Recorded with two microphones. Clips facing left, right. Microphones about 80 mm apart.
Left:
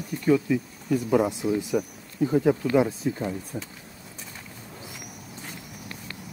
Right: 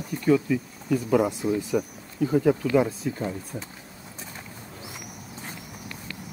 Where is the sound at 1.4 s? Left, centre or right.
Centre.